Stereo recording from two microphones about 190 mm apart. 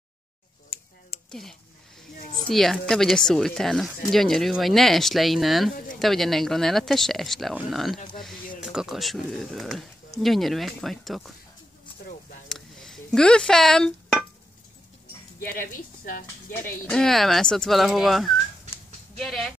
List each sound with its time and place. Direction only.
1.3 s speech: centre (ahead or behind)
12.4 s a sound: centre (ahead or behind)
15.4 s speech: 50° left (ahead or behind)
16.8 s speech: 5° left (ahead or behind)